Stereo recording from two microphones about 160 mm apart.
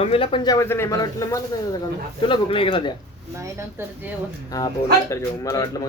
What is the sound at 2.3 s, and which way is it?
Speech, 35° left (ahead or behind).